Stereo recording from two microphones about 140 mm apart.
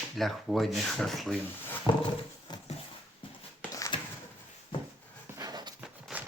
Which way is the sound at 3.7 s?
25° left (ahead or behind).